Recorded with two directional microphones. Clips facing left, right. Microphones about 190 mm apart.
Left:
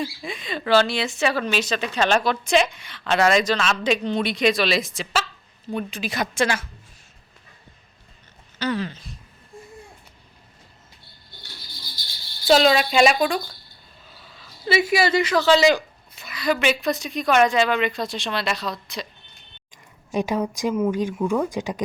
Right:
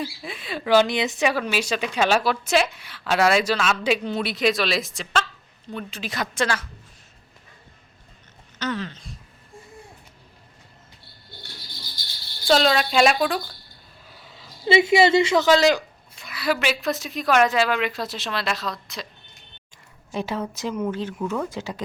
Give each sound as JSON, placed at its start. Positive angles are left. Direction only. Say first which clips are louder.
{"t": 0.0, "sound": "speech", "louder": "left 2 dB", "side_deg": -5}
{"t": 5.6, "sound": "speech", "louder": "left 5 dB", "side_deg": 10}
{"t": 8.5, "sound": "speech", "louder": "left 3 dB", "side_deg": 10}
{"t": 12.5, "sound": "speech", "louder": "left 2 dB", "side_deg": 5}
{"t": 14.2, "sound": "speech", "louder": "right 3 dB", "side_deg": -20}
{"t": 15.4, "sound": "speech", "louder": "left 1 dB", "side_deg": 0}
{"t": 20.1, "sound": "speech", "louder": "left 4 dB", "side_deg": 15}